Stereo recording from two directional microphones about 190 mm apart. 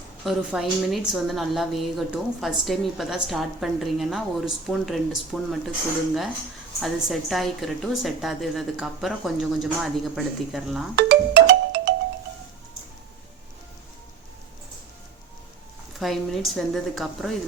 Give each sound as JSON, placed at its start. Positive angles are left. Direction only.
{"t": 0.3, "sound": "a woman's voice", "side_deg": 0}
{"t": 6.7, "sound": "a woman's voice", "side_deg": 0}
{"t": 10.9, "sound": "music", "side_deg": -55}
{"t": 16.0, "sound": "a woman's voice", "side_deg": 0}